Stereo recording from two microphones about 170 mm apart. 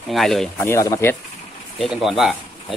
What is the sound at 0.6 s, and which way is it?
Speech, 15° left (ahead or behind).